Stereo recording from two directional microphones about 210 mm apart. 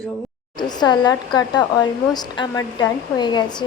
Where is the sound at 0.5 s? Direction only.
20° left (ahead or behind).